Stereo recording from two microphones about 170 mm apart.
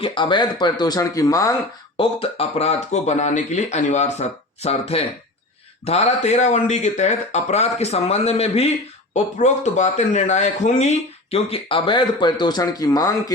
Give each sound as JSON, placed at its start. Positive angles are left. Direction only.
{"t": 0.0, "sound": "speech", "side_deg": 30}
{"t": 2.0, "sound": "speech", "side_deg": 30}